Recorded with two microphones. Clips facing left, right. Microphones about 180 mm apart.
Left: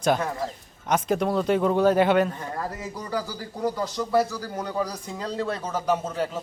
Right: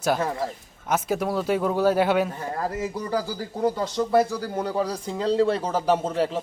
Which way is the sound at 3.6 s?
25° right (ahead or behind).